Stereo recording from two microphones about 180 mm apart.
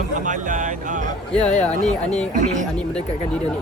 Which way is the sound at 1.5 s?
40° left (ahead or behind).